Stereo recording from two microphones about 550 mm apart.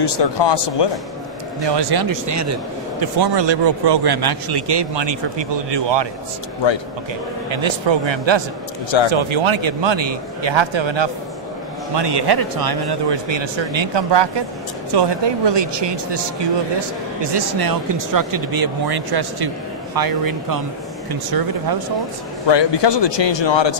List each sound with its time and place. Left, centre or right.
0.0 s speech: left
1.7 s speech: right
3.0 s speech: right
7.4 s speech: right
22.5 s speech: left